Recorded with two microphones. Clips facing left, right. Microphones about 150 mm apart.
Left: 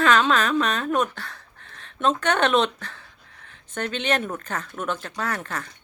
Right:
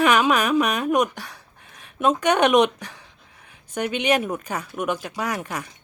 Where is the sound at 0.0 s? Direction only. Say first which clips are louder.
Right 1 dB; 15° right (ahead or behind).